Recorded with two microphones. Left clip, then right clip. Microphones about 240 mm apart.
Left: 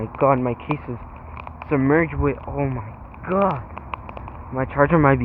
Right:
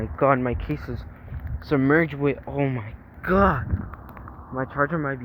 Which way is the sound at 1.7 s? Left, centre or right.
Right.